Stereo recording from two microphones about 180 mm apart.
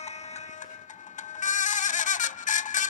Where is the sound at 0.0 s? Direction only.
40° left (ahead or behind).